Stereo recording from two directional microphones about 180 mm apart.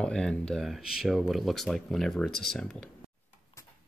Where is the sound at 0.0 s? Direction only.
5° left (ahead or behind).